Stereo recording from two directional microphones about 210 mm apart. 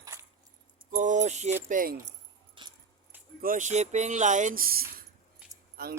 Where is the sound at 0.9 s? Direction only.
35° right (ahead or behind).